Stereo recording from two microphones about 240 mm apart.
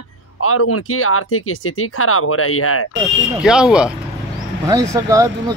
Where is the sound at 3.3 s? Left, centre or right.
Centre.